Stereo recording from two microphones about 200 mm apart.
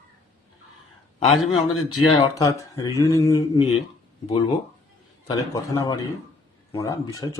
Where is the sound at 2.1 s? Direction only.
20° left (ahead or behind).